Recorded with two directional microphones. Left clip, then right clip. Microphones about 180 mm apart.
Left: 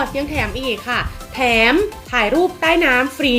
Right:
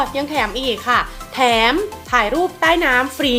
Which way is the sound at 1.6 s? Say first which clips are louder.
Left 2 dB; 10° left (ahead or behind).